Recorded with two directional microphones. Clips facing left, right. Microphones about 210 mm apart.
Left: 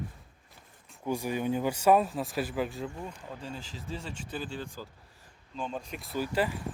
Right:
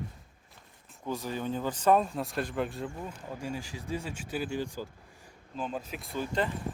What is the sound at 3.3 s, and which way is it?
Speech, 10° right (ahead or behind).